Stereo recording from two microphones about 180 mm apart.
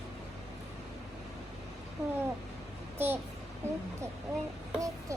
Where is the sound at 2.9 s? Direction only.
10° right (ahead or behind).